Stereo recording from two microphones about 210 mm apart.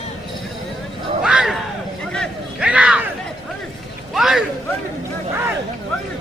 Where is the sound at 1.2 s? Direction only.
5° right (ahead or behind).